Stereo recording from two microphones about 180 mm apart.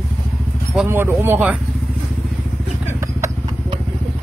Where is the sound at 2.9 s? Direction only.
15° right (ahead or behind).